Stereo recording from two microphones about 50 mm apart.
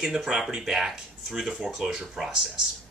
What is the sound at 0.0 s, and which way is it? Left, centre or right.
Speech, centre.